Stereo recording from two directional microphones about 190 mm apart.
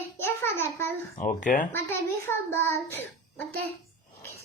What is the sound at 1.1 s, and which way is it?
Speech, 45° left (ahead or behind).